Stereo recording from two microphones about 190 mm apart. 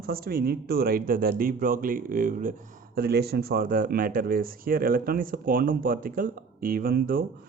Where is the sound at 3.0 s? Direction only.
55° right (ahead or behind).